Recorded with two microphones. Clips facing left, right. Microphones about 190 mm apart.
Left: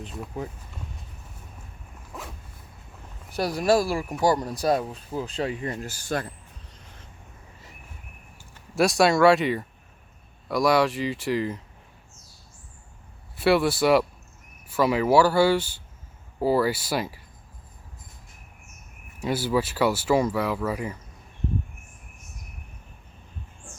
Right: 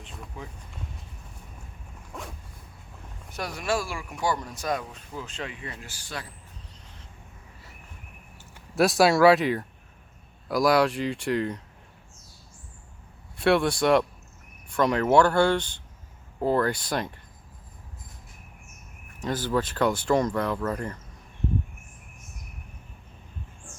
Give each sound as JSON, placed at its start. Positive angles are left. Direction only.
{"t": 2.1, "sound": "zipper", "side_deg": 5}
{"t": 3.3, "sound": "speech", "side_deg": 35}
{"t": 8.7, "sound": "speech", "side_deg": 0}
{"t": 13.3, "sound": "speech", "side_deg": 5}
{"t": 19.2, "sound": "speech", "side_deg": 10}